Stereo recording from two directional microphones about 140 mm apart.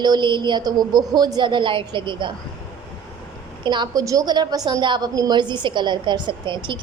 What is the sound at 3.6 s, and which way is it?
A woman's voice, 35° right (ahead or behind).